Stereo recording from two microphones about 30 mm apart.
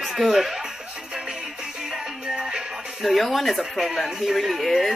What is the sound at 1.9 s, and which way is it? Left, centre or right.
Music, right.